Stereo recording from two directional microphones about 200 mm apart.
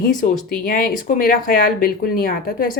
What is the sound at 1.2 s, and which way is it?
Speech, 45° left (ahead or behind).